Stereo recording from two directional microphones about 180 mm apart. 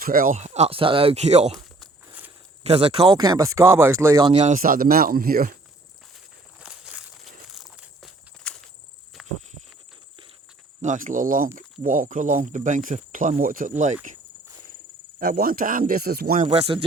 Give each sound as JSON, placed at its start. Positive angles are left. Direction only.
{"t": 0.0, "sound": "speech", "side_deg": -50}
{"t": 2.6, "sound": "speech", "side_deg": -35}
{"t": 3.1, "sound": "speech", "side_deg": -20}
{"t": 4.3, "sound": "speech", "side_deg": -40}
{"t": 6.6, "sound": "walk", "side_deg": -5}
{"t": 7.4, "sound": "a sound", "side_deg": 0}
{"t": 10.8, "sound": "speech", "side_deg": -45}
{"t": 15.2, "sound": "speech", "side_deg": -55}
{"t": 16.5, "sound": "speech", "side_deg": -35}